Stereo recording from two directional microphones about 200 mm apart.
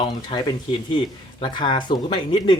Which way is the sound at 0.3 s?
20° left (ahead or behind).